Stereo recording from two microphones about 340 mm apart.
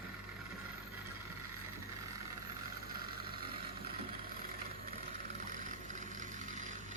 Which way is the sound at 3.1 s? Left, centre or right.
Right.